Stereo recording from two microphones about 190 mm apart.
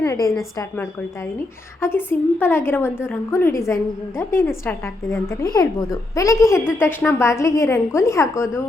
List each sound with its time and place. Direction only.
0.0 s a woman's voice: 15° left (ahead or behind)